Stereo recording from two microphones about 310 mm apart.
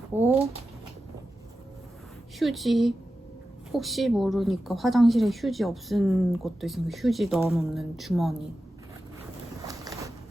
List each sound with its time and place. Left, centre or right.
0.1 s speech: centre
2.4 s a woman's voice: centre
9.6 s a sound: centre